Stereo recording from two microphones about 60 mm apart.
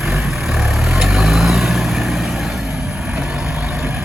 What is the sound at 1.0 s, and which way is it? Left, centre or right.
Vehicle, centre.